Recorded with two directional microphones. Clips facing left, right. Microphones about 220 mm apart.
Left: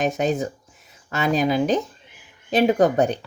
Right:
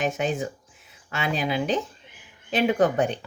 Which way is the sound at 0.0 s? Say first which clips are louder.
Left 4 dB; 40° left (ahead or behind).